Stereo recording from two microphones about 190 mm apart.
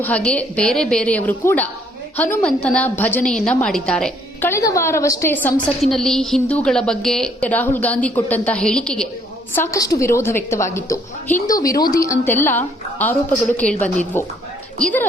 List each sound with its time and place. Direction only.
0.0 s a woman's voice: 5° left (ahead or behind)
9.6 s a woman's voice: 20° left (ahead or behind)